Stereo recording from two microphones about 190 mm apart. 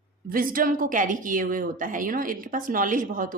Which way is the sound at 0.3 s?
45° right (ahead or behind).